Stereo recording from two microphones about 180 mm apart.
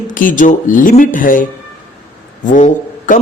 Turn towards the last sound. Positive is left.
turn(degrees=45)  # may be behind; listen again after turning